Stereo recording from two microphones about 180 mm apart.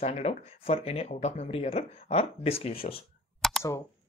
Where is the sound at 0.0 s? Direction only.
35° left (ahead or behind).